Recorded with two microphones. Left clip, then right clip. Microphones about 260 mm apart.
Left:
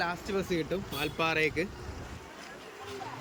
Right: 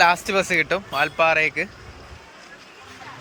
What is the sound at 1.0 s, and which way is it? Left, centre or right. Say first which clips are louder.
Speech: right 11 dB; centre.